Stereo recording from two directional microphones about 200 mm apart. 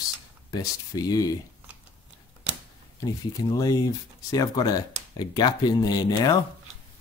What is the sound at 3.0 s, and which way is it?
Speech, 20° left (ahead or behind).